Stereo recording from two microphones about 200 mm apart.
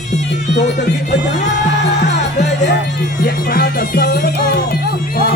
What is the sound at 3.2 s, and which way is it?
Music, 50° left (ahead or behind).